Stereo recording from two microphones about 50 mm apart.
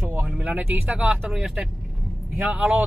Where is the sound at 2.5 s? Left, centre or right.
Centre.